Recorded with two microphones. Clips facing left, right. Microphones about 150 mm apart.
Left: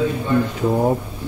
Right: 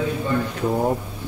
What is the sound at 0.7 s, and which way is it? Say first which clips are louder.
Speech: left 2 dB; 10° left (ahead or behind).